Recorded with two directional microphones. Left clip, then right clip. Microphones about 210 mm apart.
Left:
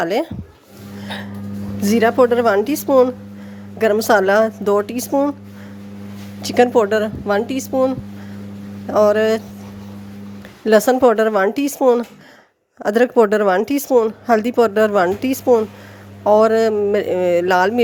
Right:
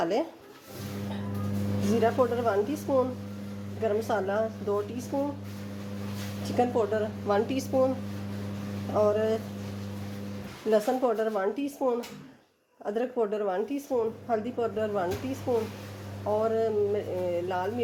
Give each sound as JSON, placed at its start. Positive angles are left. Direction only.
{"t": 0.0, "sound": "speech", "side_deg": 35}
{"t": 2.0, "sound": "a woman's voice", "side_deg": 55}
{"t": 6.4, "sound": "a woman's voice", "side_deg": 45}
{"t": 7.3, "sound": "speech", "side_deg": 35}
{"t": 9.0, "sound": "a woman's voice", "side_deg": 45}
{"t": 10.7, "sound": "a woman's voice", "side_deg": 50}